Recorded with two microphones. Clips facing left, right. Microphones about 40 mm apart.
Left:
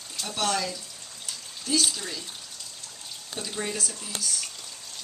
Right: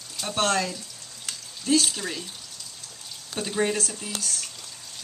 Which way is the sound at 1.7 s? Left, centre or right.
Right.